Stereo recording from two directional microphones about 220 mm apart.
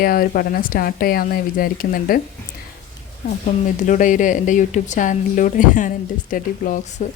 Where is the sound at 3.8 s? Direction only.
35° left (ahead or behind).